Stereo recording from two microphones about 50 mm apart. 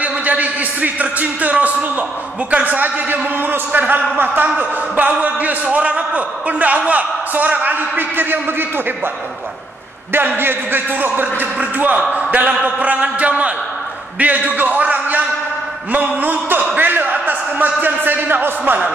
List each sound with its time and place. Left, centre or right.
0.0 s a man's voice: right
10.1 s a man's voice: right
17.8 s speech: right